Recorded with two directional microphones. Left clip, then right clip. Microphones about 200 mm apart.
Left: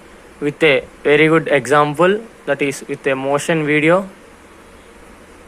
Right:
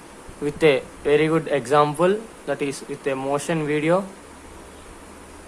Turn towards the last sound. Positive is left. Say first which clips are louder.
# left 7 dB
turn(degrees=15)  # may be behind; listen again after turning